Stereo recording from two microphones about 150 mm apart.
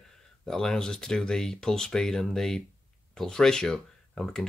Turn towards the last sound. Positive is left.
turn(degrees=5)  # may be behind; listen again after turning